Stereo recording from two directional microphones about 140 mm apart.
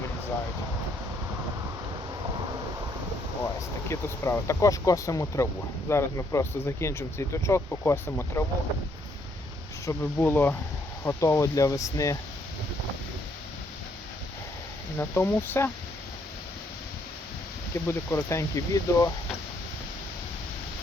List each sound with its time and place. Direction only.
3.8 s speech: 20° left (ahead or behind)
9.8 s speech: 15° left (ahead or behind)
14.9 s speech: 15° left (ahead or behind)
17.8 s speech: 20° left (ahead or behind)